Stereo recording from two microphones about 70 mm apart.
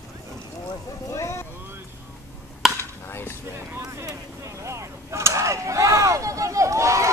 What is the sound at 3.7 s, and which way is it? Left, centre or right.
Vehicle, right.